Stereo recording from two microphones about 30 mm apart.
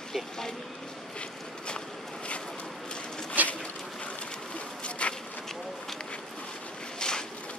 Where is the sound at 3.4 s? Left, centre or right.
Right.